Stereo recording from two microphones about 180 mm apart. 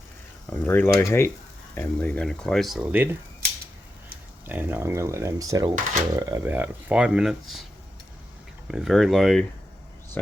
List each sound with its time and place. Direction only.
0.5 s speech: 10° left (ahead or behind); by 3.2 s 10° right (ahead or behind)
4.4 s speech: 10° right (ahead or behind)
8.6 s speech: centre (ahead or behind)